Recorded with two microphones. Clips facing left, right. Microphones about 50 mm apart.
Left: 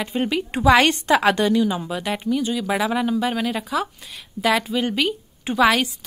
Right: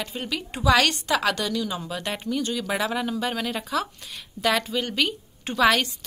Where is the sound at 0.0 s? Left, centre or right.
Left.